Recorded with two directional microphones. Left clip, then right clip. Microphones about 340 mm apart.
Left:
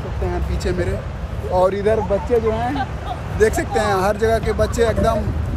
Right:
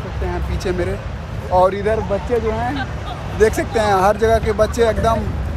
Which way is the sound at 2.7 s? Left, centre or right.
Left.